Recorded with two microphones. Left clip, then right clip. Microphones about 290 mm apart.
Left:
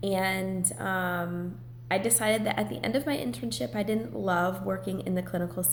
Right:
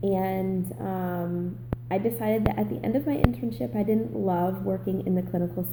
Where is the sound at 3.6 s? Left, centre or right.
Centre.